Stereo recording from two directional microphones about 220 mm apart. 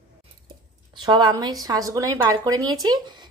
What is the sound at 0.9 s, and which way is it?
Speech, 20° right (ahead or behind).